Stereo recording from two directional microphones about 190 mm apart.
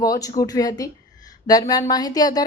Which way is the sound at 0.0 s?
20° left (ahead or behind).